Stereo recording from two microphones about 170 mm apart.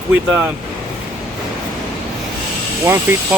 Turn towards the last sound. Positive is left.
turn(degrees=-15)  # may be behind; listen again after turning